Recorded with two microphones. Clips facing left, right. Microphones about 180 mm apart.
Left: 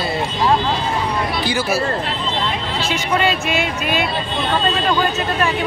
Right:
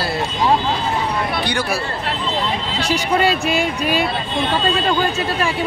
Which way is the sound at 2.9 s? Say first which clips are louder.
Right 2 dB; 35° right (ahead or behind).